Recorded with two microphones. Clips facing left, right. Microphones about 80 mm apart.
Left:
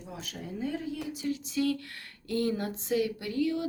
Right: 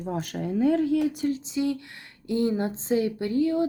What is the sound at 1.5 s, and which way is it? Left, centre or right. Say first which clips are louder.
Speech: right 3 dB; right.